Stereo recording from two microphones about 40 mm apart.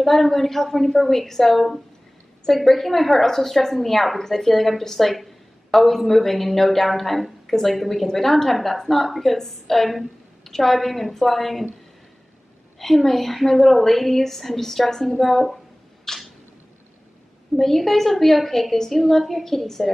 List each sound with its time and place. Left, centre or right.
0.0 s a woman's voice: centre
12.7 s a woman's voice: centre
16.1 s a sound: centre
17.6 s a woman's voice: centre